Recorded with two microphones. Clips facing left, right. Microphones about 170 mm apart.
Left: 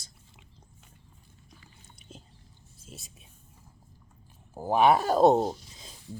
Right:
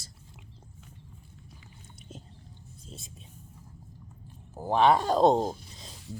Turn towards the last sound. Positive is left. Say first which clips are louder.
# left 1 dB
turn(degrees=10)  # may be behind; listen again after turning